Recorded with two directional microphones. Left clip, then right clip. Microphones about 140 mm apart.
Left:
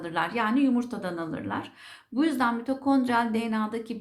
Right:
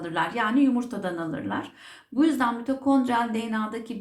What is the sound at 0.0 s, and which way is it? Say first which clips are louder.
A woman's voice: right 1 dB; 35° left (ahead or behind).